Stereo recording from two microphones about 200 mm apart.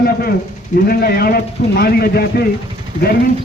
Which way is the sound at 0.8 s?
50° left (ahead or behind).